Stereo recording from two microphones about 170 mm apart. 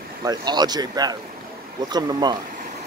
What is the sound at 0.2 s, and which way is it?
Speech, 25° right (ahead or behind).